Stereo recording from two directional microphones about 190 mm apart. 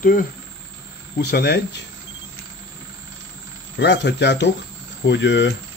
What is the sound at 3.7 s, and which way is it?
Speech, 65° left (ahead or behind).